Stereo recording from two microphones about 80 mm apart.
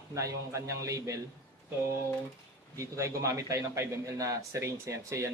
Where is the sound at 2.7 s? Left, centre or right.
Right.